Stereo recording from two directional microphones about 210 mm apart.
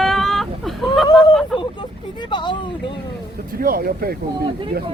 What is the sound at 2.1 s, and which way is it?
Speech, 20° left (ahead or behind).